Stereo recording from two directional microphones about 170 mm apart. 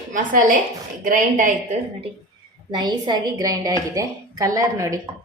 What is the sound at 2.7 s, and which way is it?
A woman's voice, 25° right (ahead or behind).